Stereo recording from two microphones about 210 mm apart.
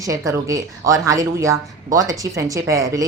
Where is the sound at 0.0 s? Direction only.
15° right (ahead or behind).